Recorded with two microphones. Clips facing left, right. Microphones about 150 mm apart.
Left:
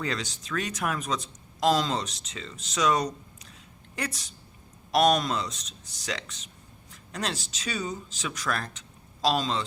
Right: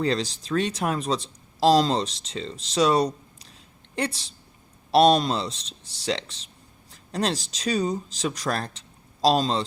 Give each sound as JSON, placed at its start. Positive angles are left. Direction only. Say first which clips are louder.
{"t": 0.0, "sound": "a woman's voice", "louder": "right 7 dB", "side_deg": -35}